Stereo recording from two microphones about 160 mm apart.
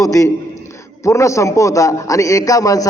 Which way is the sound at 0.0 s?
20° left (ahead or behind).